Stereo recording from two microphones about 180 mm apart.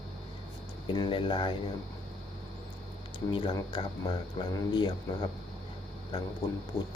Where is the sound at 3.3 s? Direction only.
25° left (ahead or behind).